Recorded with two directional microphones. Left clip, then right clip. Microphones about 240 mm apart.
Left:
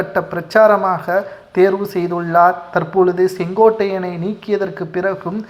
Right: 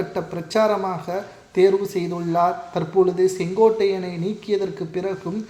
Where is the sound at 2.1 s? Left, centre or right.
Left.